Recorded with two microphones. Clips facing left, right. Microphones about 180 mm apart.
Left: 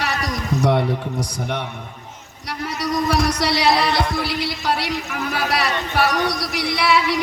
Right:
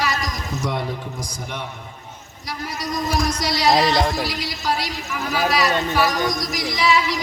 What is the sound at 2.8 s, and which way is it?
Speech, 65° left (ahead or behind).